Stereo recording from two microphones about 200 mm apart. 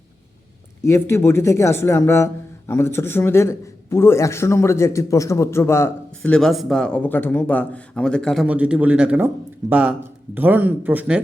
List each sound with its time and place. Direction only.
0.9 s a man's voice: 15° left (ahead or behind); by 11.2 s 5° right (ahead or behind)